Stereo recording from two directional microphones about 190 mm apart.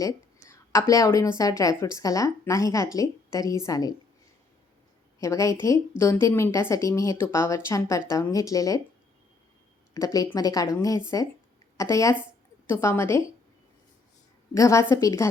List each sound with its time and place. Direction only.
0.0 s a woman's voice: 15° left (ahead or behind)
5.2 s speech: 15° left (ahead or behind)
9.9 s a woman's voice: 20° left (ahead or behind)
14.5 s speech: 15° left (ahead or behind)